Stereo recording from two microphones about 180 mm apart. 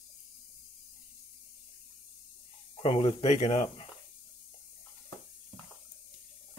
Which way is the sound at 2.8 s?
35° left (ahead or behind).